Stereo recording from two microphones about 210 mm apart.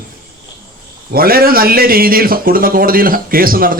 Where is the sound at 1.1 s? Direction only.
45° right (ahead or behind).